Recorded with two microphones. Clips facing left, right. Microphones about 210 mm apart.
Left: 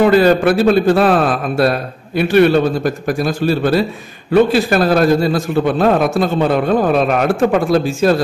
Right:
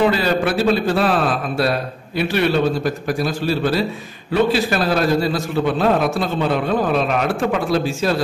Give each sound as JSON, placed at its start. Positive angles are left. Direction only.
{"t": 0.0, "sound": "a man's voice", "side_deg": 50}
{"t": 2.1, "sound": "a man's voice", "side_deg": 50}